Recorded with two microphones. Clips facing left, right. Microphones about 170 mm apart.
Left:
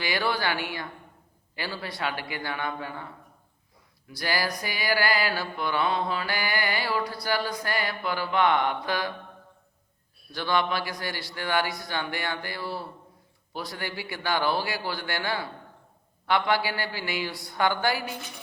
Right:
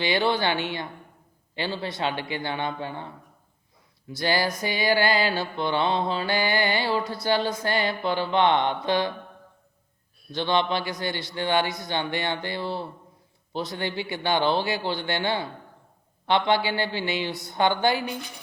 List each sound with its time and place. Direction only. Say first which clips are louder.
0.0 s mantra: right 4 dB; 25° right (ahead or behind)
10.3 s mantra: right 2 dB; 25° right (ahead or behind)